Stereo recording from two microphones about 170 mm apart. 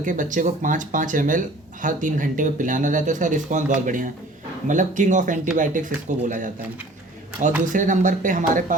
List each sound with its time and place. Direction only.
0.0 s speech: 50° right (ahead or behind)
7.6 s speech: 50° right (ahead or behind)